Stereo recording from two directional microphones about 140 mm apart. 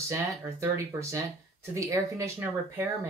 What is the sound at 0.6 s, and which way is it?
Speech, 20° right (ahead or behind).